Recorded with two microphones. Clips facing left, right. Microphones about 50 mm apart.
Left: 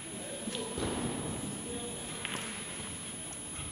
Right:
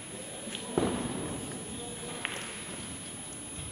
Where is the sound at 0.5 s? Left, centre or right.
Right.